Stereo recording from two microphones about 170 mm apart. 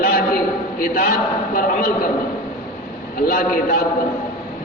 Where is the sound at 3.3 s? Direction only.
60° left (ahead or behind).